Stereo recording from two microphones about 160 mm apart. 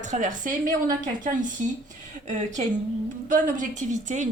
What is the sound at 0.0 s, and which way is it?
Speech, 50° right (ahead or behind).